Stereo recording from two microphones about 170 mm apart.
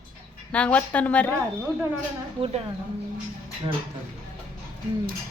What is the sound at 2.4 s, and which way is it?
Speech, 30° right (ahead or behind).